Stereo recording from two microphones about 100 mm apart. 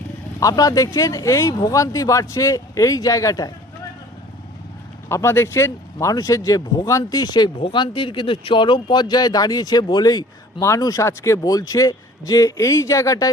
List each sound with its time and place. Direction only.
0.3 s a man's voice: 35° left (ahead or behind)
5.0 s a man's voice: 25° left (ahead or behind)